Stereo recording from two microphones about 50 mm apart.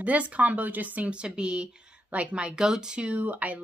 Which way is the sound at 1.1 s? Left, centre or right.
Right.